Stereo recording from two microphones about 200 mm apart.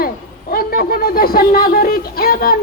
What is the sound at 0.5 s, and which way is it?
A man's voice, 45° left (ahead or behind).